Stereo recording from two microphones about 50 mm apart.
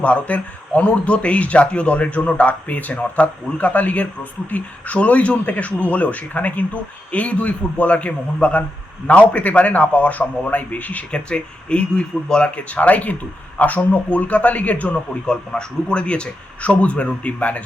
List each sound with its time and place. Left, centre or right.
0.0 s a man's voice: left
11.1 s speech: left
15.3 s speech: centre